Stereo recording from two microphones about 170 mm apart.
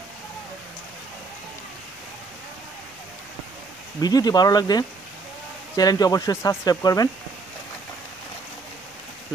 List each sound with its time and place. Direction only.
4.0 s speech: 25° left (ahead or behind)